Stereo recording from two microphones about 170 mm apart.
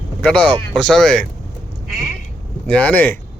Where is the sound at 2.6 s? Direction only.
10° left (ahead or behind).